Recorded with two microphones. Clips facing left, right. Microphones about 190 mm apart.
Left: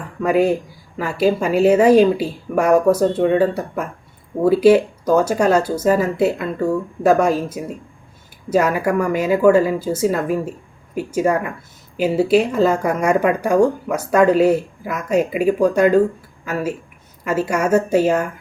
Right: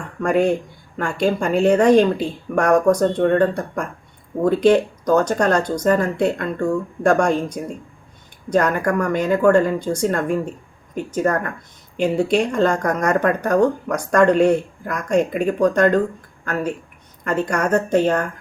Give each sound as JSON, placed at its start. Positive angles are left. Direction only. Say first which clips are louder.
{"t": 0.0, "sound": "speech", "louder": "left 1 dB", "side_deg": 5}